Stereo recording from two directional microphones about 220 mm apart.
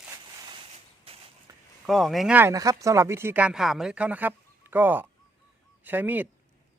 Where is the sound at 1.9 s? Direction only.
Centre (ahead or behind).